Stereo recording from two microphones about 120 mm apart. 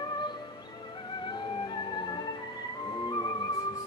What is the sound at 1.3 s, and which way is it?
Music, 40° left (ahead or behind).